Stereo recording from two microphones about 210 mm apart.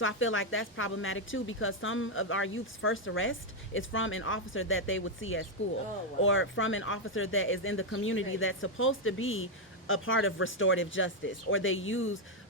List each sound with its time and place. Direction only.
0.0 s speech: 70° left (ahead or behind)